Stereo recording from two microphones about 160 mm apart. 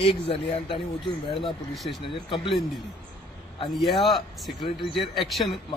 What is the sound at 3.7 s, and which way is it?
Speech, centre (ahead or behind).